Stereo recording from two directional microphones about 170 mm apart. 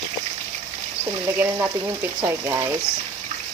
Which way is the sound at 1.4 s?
10° right (ahead or behind).